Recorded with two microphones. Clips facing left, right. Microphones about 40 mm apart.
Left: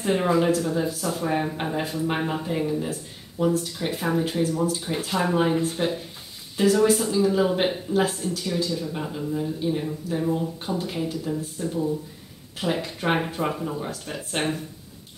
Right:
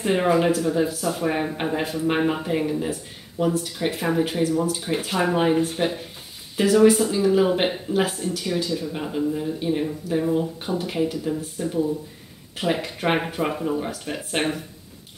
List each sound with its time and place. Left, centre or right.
0.0 s speech: centre
0.5 s speech: centre